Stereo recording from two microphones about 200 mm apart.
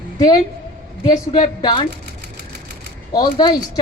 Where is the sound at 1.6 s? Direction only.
20° left (ahead or behind).